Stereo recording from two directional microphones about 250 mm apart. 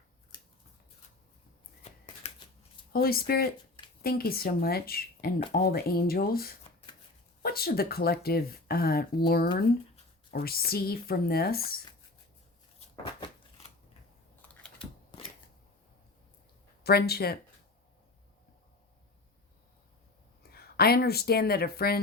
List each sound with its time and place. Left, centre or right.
1.8 s shuffling cards: left
2.9 s speech: left
13.1 s a sound: centre
14.4 s typing: centre
16.8 s speech: left
20.4 s speech: left